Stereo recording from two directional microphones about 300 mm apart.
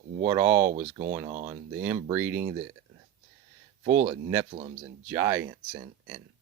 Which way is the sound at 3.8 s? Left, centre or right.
Right.